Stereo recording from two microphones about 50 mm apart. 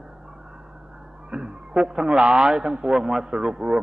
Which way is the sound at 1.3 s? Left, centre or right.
Centre.